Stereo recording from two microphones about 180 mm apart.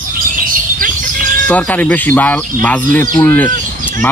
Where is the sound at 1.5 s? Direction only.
10° left (ahead or behind).